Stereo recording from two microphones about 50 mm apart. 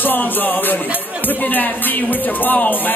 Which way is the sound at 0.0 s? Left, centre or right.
Left.